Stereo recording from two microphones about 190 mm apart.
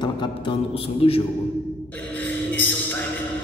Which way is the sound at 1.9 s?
10° left (ahead or behind).